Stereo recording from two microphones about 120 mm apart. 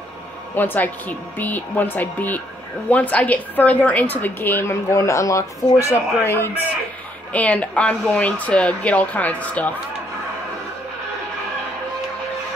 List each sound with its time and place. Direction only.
0.6 s a woman's voice: 15° left (ahead or behind)